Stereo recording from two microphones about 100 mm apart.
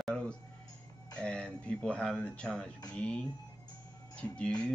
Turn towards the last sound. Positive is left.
turn(degrees=10)  # may be behind; listen again after turning